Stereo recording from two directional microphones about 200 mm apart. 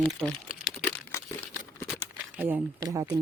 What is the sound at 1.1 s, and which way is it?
Crumpling, 15° left (ahead or behind).